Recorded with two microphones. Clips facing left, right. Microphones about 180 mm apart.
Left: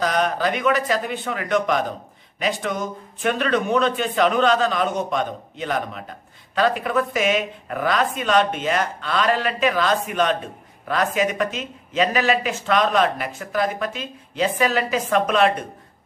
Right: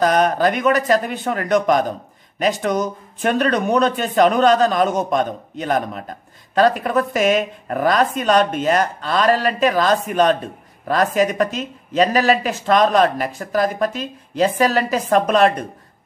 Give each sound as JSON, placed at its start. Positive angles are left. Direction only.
{"t": 0.0, "sound": "speech", "side_deg": -45}